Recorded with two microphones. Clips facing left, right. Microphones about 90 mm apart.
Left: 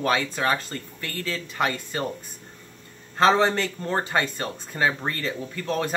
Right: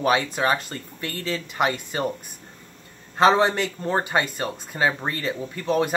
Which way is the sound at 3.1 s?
15° right (ahead or behind).